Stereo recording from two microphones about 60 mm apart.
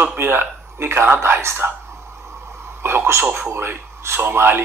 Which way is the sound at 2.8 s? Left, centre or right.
Right.